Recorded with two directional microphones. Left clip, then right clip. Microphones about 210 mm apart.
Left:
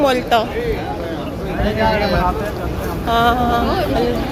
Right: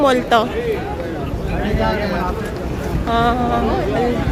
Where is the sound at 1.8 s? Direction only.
45° left (ahead or behind).